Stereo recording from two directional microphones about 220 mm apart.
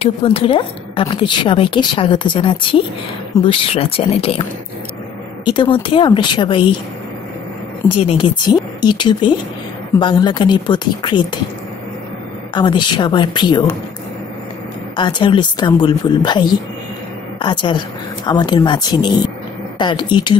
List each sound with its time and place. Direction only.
0.0 s a woman's voice: 25° left (ahead or behind)
5.4 s a woman's voice: 20° left (ahead or behind)
7.9 s a woman's voice: 25° left (ahead or behind)
12.5 s a woman's voice: 20° left (ahead or behind)
15.0 s a woman's voice: 20° left (ahead or behind)